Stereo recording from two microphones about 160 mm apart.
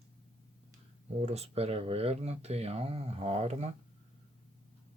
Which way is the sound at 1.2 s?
40° right (ahead or behind).